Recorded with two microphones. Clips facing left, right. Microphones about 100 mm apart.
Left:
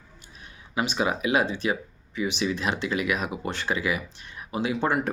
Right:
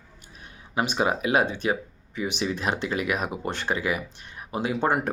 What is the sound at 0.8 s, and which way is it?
Speech, 45° right (ahead or behind).